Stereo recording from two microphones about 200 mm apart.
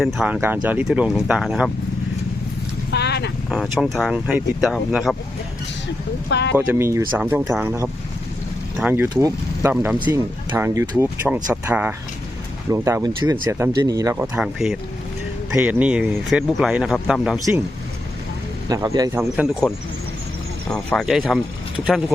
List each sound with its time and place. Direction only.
0.0 s speech: centre (ahead or behind)
2.9 s dog: 55° left (ahead or behind)
3.5 s speech: centre (ahead or behind)
6.5 s speech: 10° right (ahead or behind)
14.3 s speech: centre (ahead or behind)
18.7 s speech: 15° right (ahead or behind)
20.7 s speech: 5° left (ahead or behind)